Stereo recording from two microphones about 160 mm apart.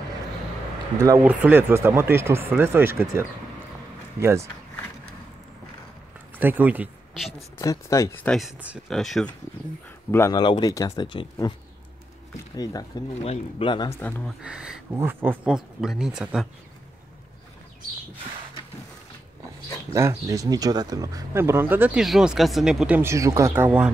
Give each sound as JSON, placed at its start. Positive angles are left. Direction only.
{"t": 1.0, "sound": "speech", "side_deg": -20}
{"t": 6.3, "sound": "speech", "side_deg": -10}
{"t": 7.5, "sound": "speech", "side_deg": 20}
{"t": 8.2, "sound": "speech", "side_deg": 5}
{"t": 10.1, "sound": "speech", "side_deg": 15}
{"t": 10.4, "sound": "speech", "side_deg": 30}
{"t": 13.2, "sound": "speech", "side_deg": 35}
{"t": 14.2, "sound": "speech", "side_deg": -5}
{"t": 19.9, "sound": "speech", "side_deg": -20}